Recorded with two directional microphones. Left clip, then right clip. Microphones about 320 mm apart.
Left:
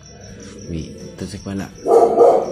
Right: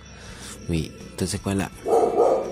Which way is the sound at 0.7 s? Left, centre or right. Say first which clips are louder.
Right 2 dB; right.